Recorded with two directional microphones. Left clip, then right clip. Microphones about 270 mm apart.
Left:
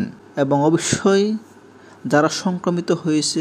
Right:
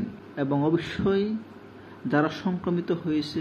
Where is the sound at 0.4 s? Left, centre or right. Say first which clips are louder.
Left 8 dB; left.